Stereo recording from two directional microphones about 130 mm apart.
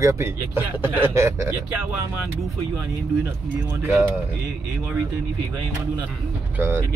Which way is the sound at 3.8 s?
20° right (ahead or behind).